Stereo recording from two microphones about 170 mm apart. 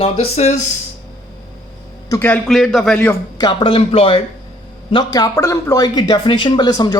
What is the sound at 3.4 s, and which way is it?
A man's voice, 30° left (ahead or behind).